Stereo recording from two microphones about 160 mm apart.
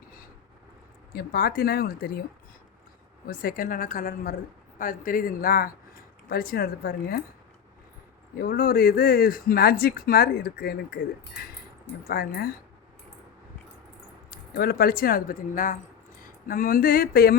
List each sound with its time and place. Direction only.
1.1 s speech: 75° left (ahead or behind)
3.2 s a woman's voice: 65° left (ahead or behind)
8.4 s speech: 70° left (ahead or behind)
12.0 s speech: 75° left (ahead or behind)
14.3 s speech: 75° left (ahead or behind)